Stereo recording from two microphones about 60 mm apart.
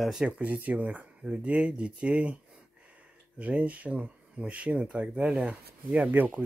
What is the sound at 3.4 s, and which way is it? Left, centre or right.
Speech, right.